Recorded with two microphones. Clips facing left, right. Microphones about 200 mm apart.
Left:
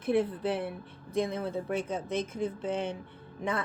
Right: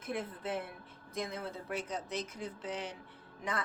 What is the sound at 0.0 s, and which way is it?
Speech, 30° left (ahead or behind).